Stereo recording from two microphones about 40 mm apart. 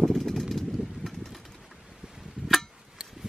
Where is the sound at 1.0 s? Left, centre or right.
Centre.